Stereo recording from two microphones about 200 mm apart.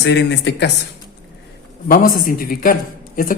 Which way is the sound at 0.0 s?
60° left (ahead or behind).